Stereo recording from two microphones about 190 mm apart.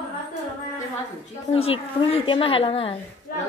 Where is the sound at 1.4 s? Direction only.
30° left (ahead or behind).